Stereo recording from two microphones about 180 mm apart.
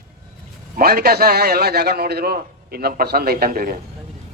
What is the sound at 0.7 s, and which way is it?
Speech, 55° right (ahead or behind).